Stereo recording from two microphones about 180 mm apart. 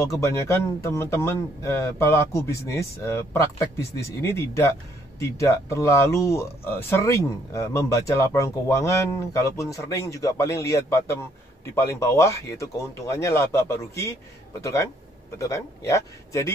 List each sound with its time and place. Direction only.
0.0 s speech: 15° left (ahead or behind)